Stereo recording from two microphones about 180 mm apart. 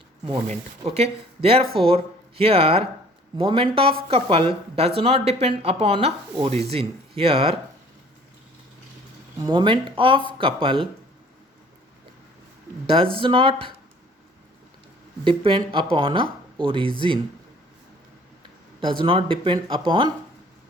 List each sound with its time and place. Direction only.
0.3 s speech: 35° right (ahead or behind)
9.4 s speech: 25° right (ahead or behind)
12.9 s speech: 30° right (ahead or behind)
15.2 s speech: 30° right (ahead or behind)
18.8 s speech: 30° right (ahead or behind)